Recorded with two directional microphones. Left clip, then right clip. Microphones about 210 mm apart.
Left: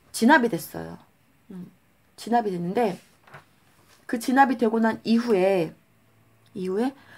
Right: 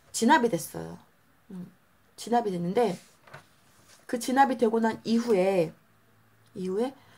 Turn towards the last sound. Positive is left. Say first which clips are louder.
# left 3 dB
turn(degrees=30)  # may be behind; listen again after turning